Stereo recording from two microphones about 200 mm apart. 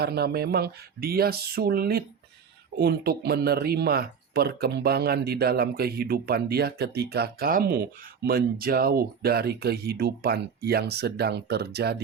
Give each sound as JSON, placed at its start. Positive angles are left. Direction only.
{"t": 0.0, "sound": "speech", "side_deg": -50}